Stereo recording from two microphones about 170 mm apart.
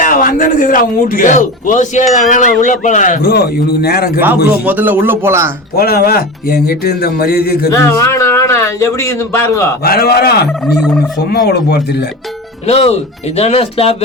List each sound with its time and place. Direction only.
0.0 s a man's voice: 55° left (ahead or behind)
4.4 s speech: 10° right (ahead or behind)
5.7 s speech: 65° left (ahead or behind)
7.7 s a man's voice: 15° left (ahead or behind)
9.8 s speech: 65° left (ahead or behind)
12.6 s speech: 35° left (ahead or behind)